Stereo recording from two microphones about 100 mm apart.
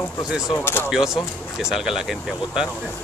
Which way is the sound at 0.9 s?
5° right (ahead or behind).